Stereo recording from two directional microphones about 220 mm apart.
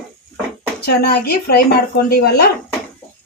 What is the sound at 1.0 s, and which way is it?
A woman's voice, 45° left (ahead or behind).